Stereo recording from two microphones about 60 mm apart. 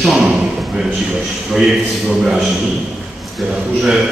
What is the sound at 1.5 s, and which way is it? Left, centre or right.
Speech, centre.